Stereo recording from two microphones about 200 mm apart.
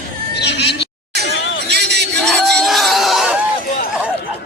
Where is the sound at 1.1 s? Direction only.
55° right (ahead or behind).